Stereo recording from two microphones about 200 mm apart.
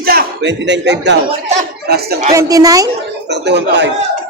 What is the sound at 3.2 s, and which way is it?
Speech, 60° right (ahead or behind).